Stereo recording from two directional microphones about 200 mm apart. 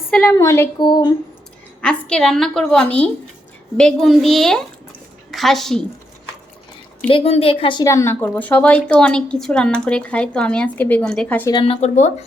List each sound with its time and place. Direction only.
0.1 s speech: 5° left (ahead or behind); by 1.0 s 20° left (ahead or behind)
1.8 s a woman's voice: 5° left (ahead or behind)
7.1 s speech: 30° left (ahead or behind); by 11.5 s 10° left (ahead or behind)
11.5 s speech: 30° left (ahead or behind)